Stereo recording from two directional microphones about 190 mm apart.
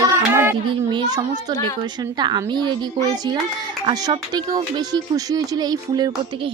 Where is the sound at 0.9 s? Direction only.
25° right (ahead or behind).